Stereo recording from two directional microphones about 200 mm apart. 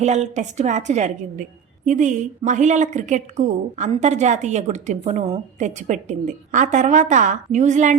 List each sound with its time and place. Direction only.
0.0 s a woman's voice: 35° right (ahead or behind)